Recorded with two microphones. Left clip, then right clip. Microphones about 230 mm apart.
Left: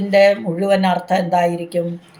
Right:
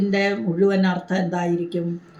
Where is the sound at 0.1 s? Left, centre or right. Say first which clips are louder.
Left 14 dB; centre.